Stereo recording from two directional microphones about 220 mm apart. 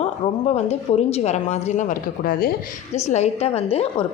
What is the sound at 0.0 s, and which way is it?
A woman's voice, 30° left (ahead or behind).